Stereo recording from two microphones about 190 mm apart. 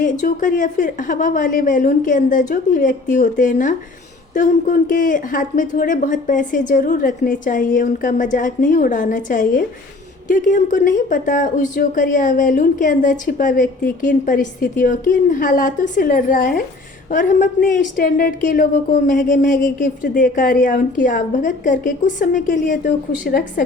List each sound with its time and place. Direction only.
0.0 s speech: 45° left (ahead or behind)